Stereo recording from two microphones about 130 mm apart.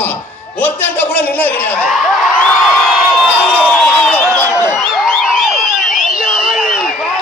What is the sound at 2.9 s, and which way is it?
Crowd, 5° right (ahead or behind).